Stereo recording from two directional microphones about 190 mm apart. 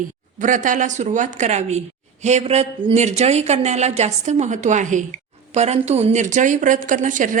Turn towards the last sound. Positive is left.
turn(degrees=-40)  # may be behind; listen again after turning